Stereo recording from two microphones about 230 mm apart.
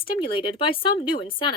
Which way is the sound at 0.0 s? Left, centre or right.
Left.